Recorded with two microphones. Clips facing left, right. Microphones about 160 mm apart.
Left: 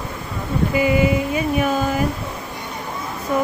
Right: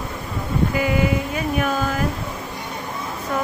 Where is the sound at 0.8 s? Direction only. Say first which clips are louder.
Left 3 dB; 10° left (ahead or behind).